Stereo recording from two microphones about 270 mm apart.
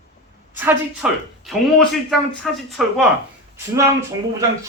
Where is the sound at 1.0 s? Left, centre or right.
Centre.